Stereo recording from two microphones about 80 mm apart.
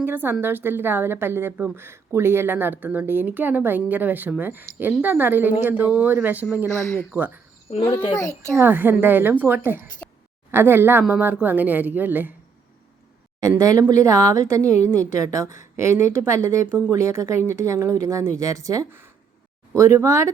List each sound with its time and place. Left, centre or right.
0.0 s speech: right
8.1 s a child's voice: left
8.5 s speech: right
13.6 s a woman's voice: right